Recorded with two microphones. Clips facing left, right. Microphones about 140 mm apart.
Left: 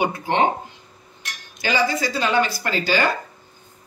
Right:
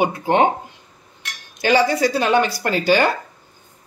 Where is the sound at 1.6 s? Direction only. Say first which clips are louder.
Right 5 dB; 65° right (ahead or behind).